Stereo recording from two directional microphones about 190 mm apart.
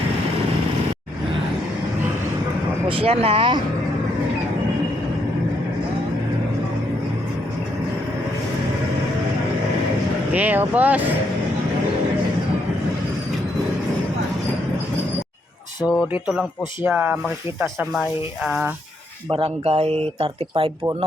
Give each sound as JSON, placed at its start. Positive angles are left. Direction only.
{"t": 3.0, "sound": "speech", "side_deg": -30}
{"t": 10.3, "sound": "speech", "side_deg": -10}
{"t": 15.8, "sound": "speech", "side_deg": -5}
{"t": 19.3, "sound": "speech", "side_deg": -30}